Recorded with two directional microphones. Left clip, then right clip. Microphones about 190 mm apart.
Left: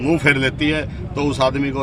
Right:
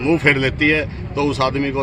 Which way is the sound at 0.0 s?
35° left (ahead or behind).